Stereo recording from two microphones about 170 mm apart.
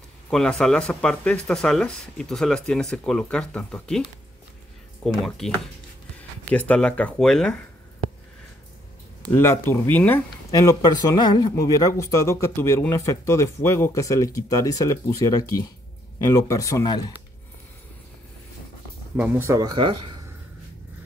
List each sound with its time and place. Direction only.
0.3 s speech: 5° left (ahead or behind)
5.0 s speech: centre (ahead or behind)
9.3 s speech: 15° left (ahead or behind)
19.1 s speech: 10° right (ahead or behind); by 20.2 s 30° right (ahead or behind)